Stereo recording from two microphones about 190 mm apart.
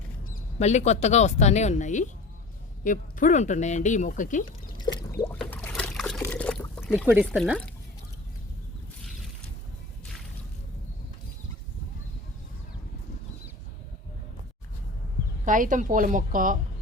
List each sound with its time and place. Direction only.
0.3 s speech: 35° left (ahead or behind)
5.2 s boat: 10° left (ahead or behind)
6.2 s pour: 10° left (ahead or behind)
7.3 s speech: centre (ahead or behind)
15.4 s a woman's voice: 45° right (ahead or behind)